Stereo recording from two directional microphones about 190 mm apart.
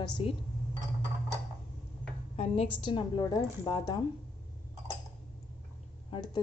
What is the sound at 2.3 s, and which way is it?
A woman's voice, 30° left (ahead or behind).